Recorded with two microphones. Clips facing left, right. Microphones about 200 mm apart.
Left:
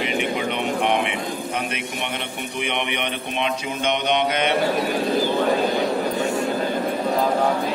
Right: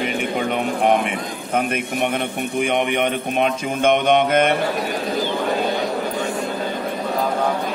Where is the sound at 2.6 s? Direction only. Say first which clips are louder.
Right 7 dB; 45° right (ahead or behind).